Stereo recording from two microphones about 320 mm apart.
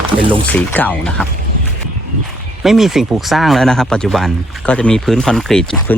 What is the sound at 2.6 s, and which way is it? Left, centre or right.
Speech, centre.